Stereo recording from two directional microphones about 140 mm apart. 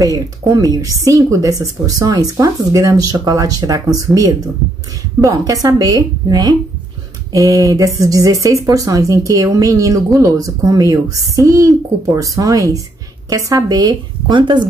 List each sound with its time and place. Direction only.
0.0 s speech: 25° right (ahead or behind)